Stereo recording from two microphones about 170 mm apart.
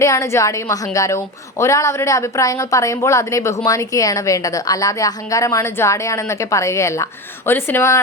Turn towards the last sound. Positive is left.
turn(degrees=15)  # may be behind; listen again after turning